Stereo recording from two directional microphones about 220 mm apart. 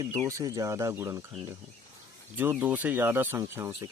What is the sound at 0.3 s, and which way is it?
Speech, 15° right (ahead or behind).